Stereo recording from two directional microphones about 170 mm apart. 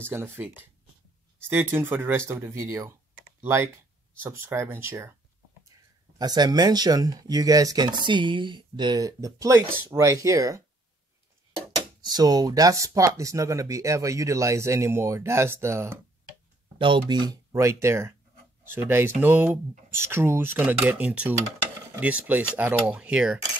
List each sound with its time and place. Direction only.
0.1 s speech: 15° right (ahead or behind)
1.5 s speech: 10° right (ahead or behind)
12.0 s speech: 25° right (ahead or behind)
16.7 s speech: 30° right (ahead or behind); by 23.4 s 5° right (ahead or behind)